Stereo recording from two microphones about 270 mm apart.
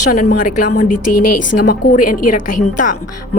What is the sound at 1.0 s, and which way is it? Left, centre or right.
Speech, left.